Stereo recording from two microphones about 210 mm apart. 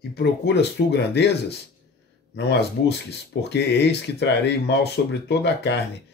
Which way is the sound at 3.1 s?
55° left (ahead or behind).